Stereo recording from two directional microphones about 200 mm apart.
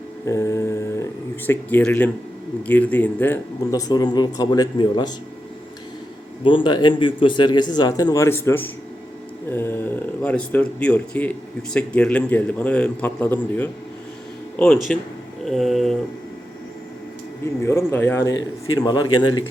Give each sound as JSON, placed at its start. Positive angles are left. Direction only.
{"t": 0.3, "sound": "mantra", "side_deg": 15}
{"t": 1.5, "sound": "speech", "side_deg": 10}
{"t": 6.4, "sound": "speech", "side_deg": 25}
{"t": 15.4, "sound": "a sound", "side_deg": 0}
{"t": 17.4, "sound": "speech", "side_deg": 15}